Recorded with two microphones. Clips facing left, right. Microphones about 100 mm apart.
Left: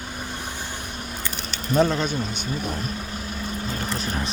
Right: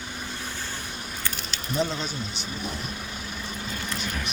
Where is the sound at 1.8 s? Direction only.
55° left (ahead or behind).